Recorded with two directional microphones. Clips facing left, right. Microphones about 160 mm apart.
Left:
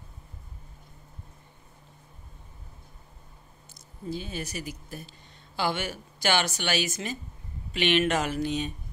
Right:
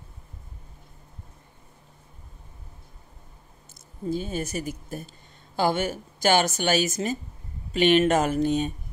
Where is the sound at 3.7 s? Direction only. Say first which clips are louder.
Right 6 dB; 45° right (ahead or behind).